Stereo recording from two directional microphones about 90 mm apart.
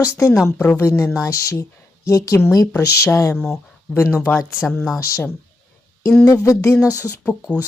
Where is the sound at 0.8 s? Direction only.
30° left (ahead or behind).